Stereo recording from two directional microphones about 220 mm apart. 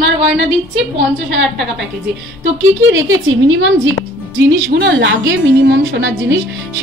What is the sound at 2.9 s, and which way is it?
Speech, 65° right (ahead or behind).